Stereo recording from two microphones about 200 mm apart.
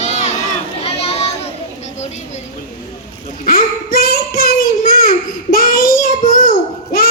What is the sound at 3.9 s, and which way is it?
Child singing, 50° left (ahead or behind).